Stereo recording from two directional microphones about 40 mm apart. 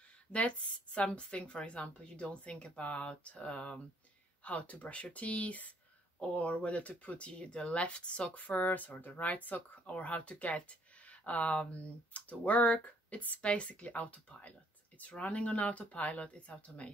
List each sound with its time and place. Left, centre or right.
0.3 s speech: left
8.5 s speech: left
9.8 s speech: left